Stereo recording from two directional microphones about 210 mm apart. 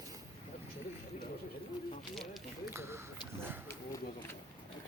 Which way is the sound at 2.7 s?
10° right (ahead or behind).